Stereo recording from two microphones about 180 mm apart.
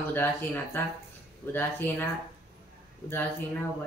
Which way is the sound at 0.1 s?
10° left (ahead or behind).